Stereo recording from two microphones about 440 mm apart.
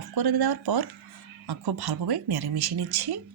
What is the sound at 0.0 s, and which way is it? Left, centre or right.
Speech, right.